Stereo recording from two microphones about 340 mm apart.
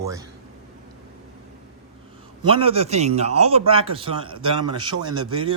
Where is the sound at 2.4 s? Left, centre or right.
Centre.